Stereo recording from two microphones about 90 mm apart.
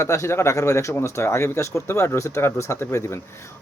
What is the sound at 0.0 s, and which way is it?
Speech, 35° left (ahead or behind).